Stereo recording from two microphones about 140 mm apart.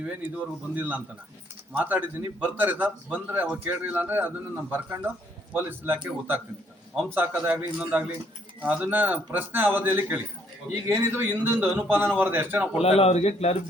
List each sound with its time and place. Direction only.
0.0 s a man's voice: 10° right (ahead or behind)
12.8 s a man's voice: 45° left (ahead or behind)